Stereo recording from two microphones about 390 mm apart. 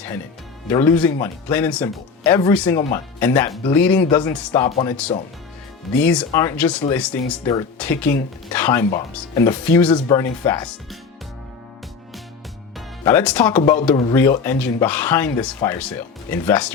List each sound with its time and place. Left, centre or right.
0.7 s speech: centre
13.1 s speech: centre
13.6 s speech: centre